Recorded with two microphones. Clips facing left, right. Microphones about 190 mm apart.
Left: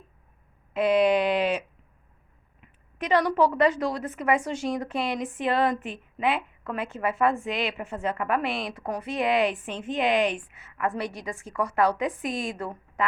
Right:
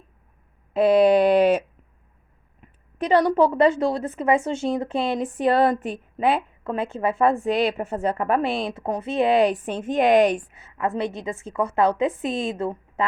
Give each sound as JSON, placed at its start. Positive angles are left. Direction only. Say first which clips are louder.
{"t": 0.7, "sound": "speech", "louder": "right 5 dB", "side_deg": -35}
{"t": 2.6, "sound": "a woman's voice", "louder": "right 6 dB", "side_deg": -30}
{"t": 10.5, "sound": "a woman's voice", "louder": "right 3 dB", "side_deg": -30}